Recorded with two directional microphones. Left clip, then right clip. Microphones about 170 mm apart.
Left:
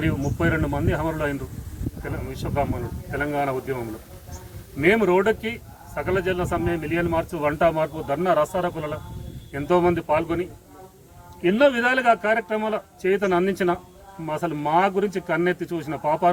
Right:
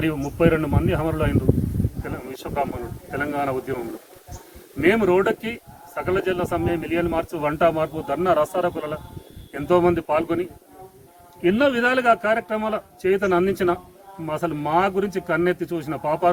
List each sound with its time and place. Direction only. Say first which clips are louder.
0.0 s speech: right 4 dB; 15° right (ahead or behind)
4.8 s speech: right 1 dB; 15° right (ahead or behind)
11.4 s speech: even; 15° right (ahead or behind)